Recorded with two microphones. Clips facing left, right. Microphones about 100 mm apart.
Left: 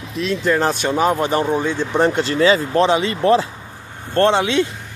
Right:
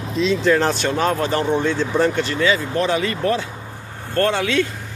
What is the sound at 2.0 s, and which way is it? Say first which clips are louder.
Speech: left 5 dB; 30° left (ahead or behind).